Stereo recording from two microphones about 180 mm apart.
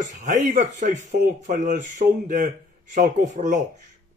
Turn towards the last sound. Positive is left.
turn(degrees=-45)  # may be behind; listen again after turning